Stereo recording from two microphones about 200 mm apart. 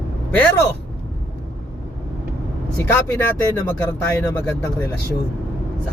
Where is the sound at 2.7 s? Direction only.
10° left (ahead or behind).